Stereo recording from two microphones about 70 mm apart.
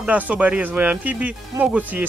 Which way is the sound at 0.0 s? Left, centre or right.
Right.